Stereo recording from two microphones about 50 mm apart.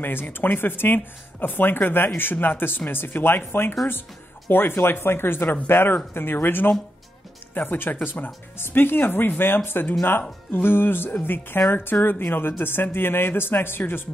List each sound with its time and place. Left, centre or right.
0.0 s speech: left